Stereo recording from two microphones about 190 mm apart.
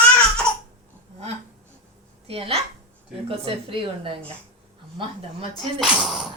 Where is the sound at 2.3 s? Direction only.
30° right (ahead or behind).